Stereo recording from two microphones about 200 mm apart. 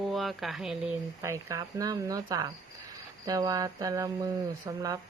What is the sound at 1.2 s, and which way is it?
Speech, 15° right (ahead or behind).